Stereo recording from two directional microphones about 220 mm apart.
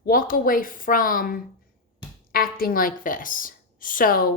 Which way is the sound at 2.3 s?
40° left (ahead or behind).